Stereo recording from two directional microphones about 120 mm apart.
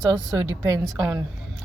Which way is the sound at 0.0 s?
25° right (ahead or behind).